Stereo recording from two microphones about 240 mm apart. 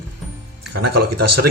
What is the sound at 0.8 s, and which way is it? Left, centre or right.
Speech, right.